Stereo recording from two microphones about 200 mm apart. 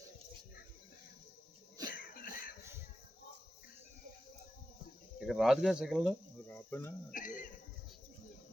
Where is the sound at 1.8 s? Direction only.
45° left (ahead or behind).